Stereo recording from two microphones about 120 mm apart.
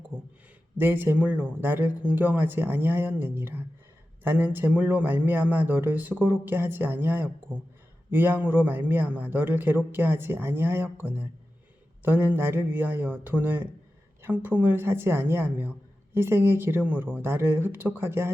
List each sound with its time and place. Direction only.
0.8 s a man's voice: 20° right (ahead or behind)